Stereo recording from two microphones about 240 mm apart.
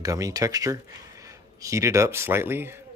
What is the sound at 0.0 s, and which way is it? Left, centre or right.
Speech, centre.